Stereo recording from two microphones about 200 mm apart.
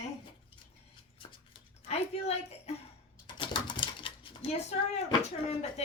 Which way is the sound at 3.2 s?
25° left (ahead or behind).